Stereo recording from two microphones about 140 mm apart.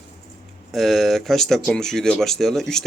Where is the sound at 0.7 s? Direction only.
Centre (ahead or behind).